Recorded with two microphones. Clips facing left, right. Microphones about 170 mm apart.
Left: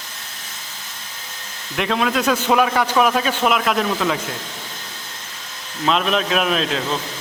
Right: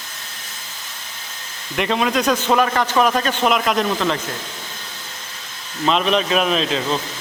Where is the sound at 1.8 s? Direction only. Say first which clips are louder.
Right 1 dB; centre (ahead or behind).